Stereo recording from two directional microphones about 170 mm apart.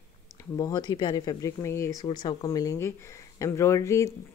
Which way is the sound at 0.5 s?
25° left (ahead or behind).